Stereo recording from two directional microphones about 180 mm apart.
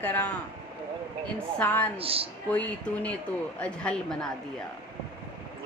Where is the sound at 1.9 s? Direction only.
30° right (ahead or behind).